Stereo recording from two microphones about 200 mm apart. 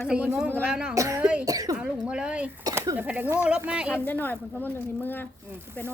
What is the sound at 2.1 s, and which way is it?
Speech, 5° right (ahead or behind).